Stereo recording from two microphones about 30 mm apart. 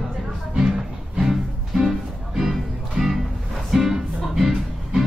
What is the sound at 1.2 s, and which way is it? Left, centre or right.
Music, centre.